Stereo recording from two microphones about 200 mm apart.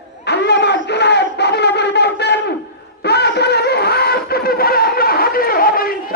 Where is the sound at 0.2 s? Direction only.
55° left (ahead or behind).